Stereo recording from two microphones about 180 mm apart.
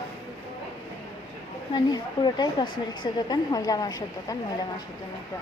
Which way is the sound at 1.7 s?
25° left (ahead or behind).